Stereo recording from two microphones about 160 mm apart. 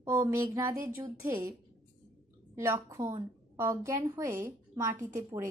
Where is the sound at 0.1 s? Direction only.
15° right (ahead or behind).